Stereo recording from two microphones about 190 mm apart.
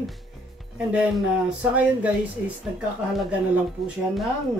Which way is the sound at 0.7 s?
5° right (ahead or behind).